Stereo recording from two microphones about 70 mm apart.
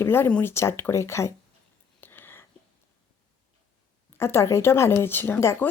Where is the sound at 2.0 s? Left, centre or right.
Left.